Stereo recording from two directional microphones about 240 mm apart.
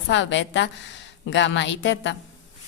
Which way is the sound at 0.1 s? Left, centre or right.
Left.